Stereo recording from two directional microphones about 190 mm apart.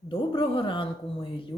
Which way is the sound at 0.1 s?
30° left (ahead or behind).